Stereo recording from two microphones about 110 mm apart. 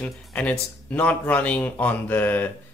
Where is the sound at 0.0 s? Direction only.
10° left (ahead or behind).